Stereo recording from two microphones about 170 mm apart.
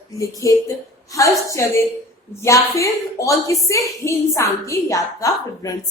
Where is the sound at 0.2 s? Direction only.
20° left (ahead or behind).